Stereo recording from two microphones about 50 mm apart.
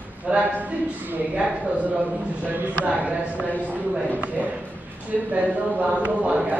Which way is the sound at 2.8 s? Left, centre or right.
Right.